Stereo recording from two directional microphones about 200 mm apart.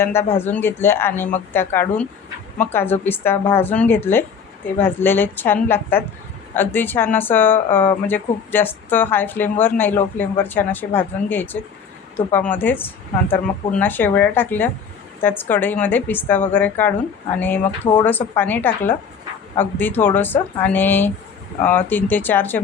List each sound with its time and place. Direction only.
0.0 s speech: 10° left (ahead or behind)